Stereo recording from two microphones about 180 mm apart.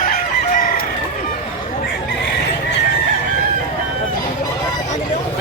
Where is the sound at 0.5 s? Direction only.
50° left (ahead or behind).